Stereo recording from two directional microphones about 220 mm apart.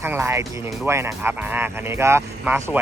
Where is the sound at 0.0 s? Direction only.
10° right (ahead or behind).